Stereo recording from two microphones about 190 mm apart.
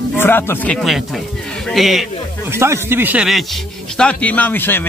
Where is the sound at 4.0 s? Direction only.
5° left (ahead or behind).